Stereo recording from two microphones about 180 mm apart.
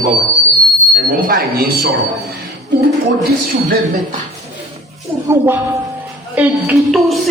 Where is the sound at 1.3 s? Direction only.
60° right (ahead or behind).